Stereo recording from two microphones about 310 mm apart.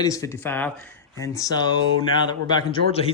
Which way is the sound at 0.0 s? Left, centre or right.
Centre.